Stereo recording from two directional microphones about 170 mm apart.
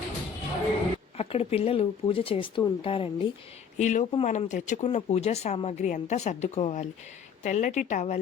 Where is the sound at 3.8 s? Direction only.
45° left (ahead or behind).